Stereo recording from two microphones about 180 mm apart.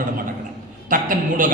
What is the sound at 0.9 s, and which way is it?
Speech, 50° right (ahead or behind).